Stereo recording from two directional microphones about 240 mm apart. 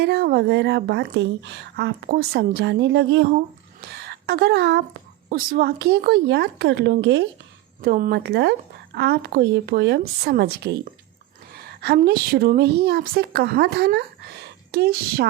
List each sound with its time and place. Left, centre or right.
0.0 s a woman's voice: right
11.8 s a woman's voice: right